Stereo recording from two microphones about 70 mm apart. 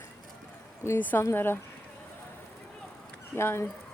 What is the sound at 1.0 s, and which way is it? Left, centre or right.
Speech, left.